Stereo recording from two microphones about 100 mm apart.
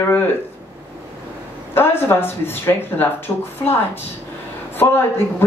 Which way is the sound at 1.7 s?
20° left (ahead or behind).